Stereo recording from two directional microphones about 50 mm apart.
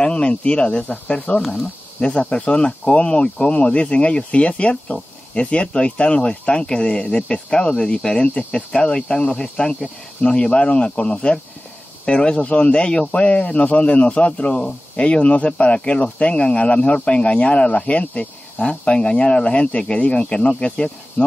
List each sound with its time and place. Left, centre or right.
0.0 s speech: left